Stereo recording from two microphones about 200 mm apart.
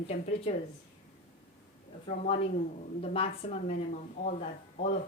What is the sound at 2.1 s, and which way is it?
A woman's voice, 35° left (ahead or behind).